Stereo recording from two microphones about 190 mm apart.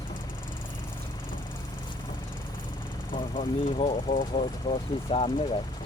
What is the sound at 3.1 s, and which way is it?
Speech, 25° left (ahead or behind).